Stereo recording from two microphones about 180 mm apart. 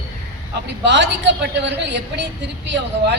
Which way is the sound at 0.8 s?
80° right.